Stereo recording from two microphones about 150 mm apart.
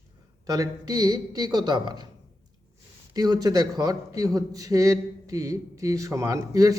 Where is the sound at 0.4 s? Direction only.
25° right (ahead or behind).